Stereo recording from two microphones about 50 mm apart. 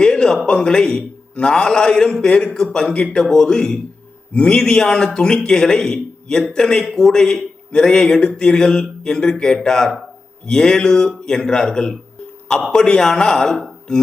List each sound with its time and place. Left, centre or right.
0.0 s a man's voice: centre